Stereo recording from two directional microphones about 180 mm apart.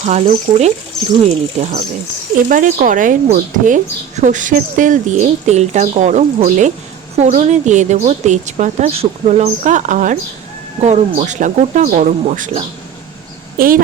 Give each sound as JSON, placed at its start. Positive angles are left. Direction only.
{"t": 0.0, "sound": "a woman's voice", "side_deg": -40}
{"t": 0.3, "sound": "a woman's voice", "side_deg": -30}
{"t": 13.6, "sound": "a woman's voice", "side_deg": -50}